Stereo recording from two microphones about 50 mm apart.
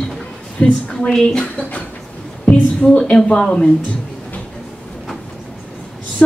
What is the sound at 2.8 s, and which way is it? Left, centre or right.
Speech, centre.